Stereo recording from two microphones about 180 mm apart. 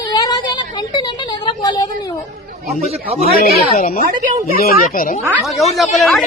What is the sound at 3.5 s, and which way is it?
Speech, 45° left (ahead or behind).